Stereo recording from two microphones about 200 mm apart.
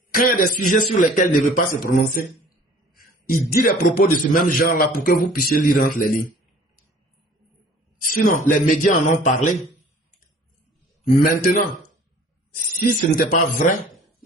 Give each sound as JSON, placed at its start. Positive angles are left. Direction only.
{"t": 0.1, "sound": "a man's voice", "side_deg": 45}
{"t": 3.5, "sound": "a man's voice", "side_deg": 45}
{"t": 8.0, "sound": "speech", "side_deg": 45}
{"t": 11.0, "sound": "a man's voice", "side_deg": 40}